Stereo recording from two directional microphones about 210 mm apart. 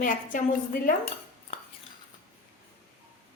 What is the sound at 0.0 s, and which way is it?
Speech, 40° left (ahead or behind).